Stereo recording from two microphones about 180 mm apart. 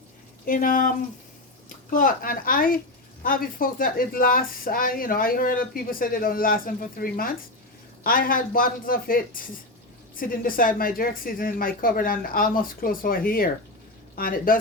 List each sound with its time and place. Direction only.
0.4 s a woman's voice: 50° left (ahead or behind)